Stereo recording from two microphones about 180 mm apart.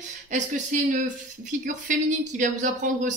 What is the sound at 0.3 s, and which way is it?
Speech, 45° right (ahead or behind).